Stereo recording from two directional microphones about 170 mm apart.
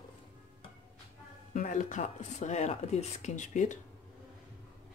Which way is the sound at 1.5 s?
50° left (ahead or behind).